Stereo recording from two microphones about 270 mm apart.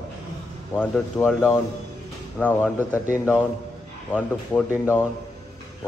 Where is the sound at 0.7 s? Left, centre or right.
Centre.